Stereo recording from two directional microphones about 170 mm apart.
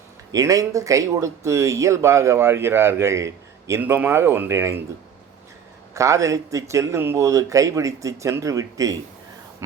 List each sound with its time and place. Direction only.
0.3 s speech: 20° right (ahead or behind)
5.9 s speech: 20° right (ahead or behind)